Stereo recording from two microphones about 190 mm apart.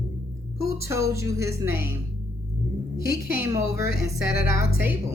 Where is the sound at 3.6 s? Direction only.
55° left (ahead or behind).